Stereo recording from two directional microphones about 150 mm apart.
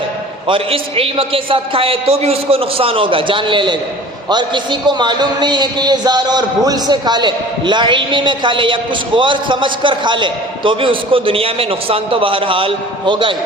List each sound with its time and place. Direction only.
0.4 s a man's voice: 35° right (ahead or behind)